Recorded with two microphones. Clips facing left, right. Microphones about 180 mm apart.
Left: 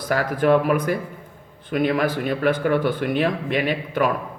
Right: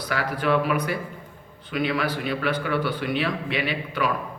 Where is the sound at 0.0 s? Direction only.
45° left (ahead or behind).